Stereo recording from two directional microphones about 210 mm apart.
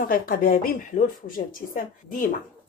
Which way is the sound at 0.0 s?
40° left (ahead or behind).